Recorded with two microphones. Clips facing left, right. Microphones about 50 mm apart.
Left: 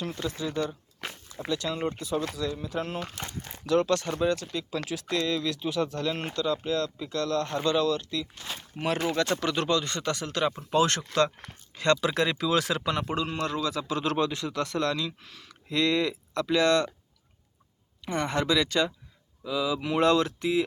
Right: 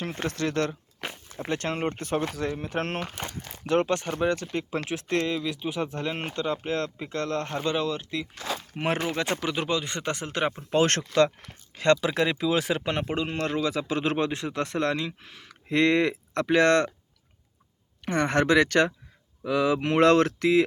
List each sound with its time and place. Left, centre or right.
0.0 s speech: right
0.3 s speech: right
1.5 s speech: right
3.1 s speech: right
4.2 s speech: right
5.3 s speech: right
8.7 s speech: right
9.0 s speech: right
9.4 s speech: centre
10.7 s speech: right
11.7 s a sound: right
11.9 s speech: right
18.0 s speech: right